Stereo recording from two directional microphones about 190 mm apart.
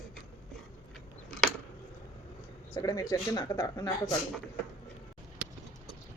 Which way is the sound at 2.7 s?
20° left (ahead or behind).